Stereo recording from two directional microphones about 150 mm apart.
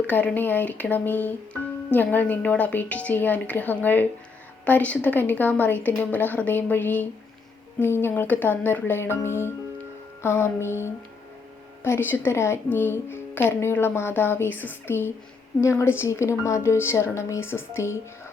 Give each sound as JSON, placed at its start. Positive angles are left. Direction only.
{"t": 0.1, "sound": "speech", "side_deg": 10}